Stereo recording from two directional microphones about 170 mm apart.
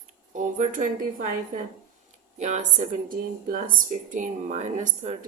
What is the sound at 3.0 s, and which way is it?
A woman's voice, 55° right (ahead or behind).